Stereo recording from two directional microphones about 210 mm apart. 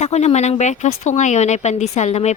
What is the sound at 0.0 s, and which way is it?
A woman's voice, 30° left (ahead or behind).